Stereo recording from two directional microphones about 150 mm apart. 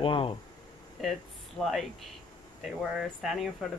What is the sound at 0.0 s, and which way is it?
Speech, 35° left (ahead or behind).